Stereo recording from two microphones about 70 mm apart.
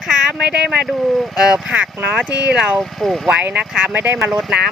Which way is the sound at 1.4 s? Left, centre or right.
Centre.